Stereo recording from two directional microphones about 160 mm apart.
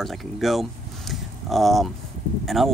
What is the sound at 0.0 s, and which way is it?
Speech, centre (ahead or behind).